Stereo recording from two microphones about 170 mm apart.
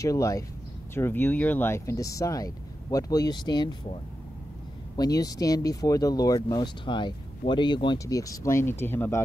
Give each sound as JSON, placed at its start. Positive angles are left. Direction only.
{"t": 0.0, "sound": "speech", "side_deg": 20}